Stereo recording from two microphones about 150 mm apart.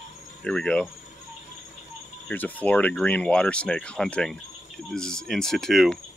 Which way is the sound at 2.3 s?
10° left (ahead or behind).